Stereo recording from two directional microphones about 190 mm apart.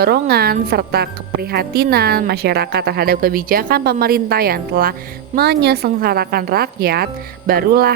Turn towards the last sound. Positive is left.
turn(degrees=-55)  # may be behind; listen again after turning